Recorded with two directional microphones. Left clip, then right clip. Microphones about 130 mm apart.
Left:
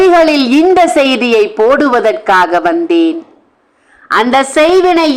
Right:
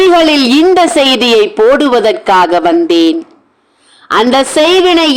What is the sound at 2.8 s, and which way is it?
A woman's voice, 30° right (ahead or behind).